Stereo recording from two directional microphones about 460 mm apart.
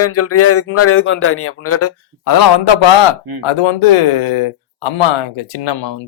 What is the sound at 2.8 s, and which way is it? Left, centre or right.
Speech, left.